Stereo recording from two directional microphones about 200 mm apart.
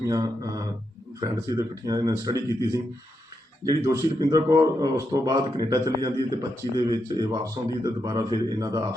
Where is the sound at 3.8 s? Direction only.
15° right (ahead or behind).